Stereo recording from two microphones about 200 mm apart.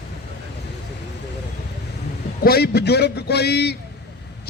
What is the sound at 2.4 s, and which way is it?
A man's voice, 50° left (ahead or behind).